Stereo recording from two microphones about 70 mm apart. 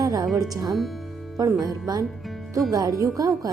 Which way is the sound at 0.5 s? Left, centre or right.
Right.